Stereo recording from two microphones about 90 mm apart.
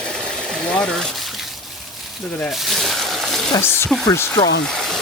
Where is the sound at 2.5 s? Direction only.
Centre (ahead or behind).